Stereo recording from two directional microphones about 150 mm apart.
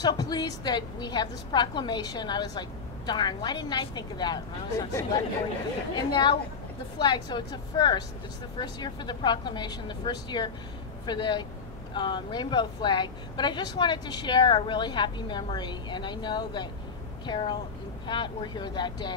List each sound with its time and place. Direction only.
0.0 s speech: 25° left (ahead or behind)